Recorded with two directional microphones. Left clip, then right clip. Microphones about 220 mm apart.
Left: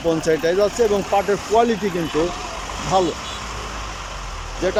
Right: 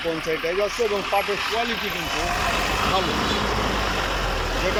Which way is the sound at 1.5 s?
20° left (ahead or behind).